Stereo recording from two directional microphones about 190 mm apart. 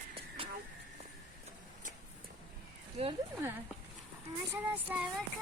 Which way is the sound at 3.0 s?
30° right (ahead or behind).